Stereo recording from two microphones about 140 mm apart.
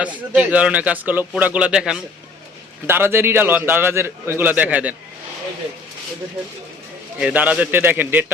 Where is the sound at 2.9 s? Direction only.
15° right (ahead or behind).